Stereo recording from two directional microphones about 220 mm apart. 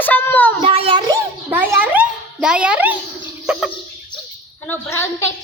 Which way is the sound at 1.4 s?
10° right (ahead or behind).